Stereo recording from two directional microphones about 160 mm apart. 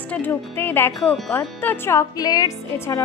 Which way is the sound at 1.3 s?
10° left (ahead or behind).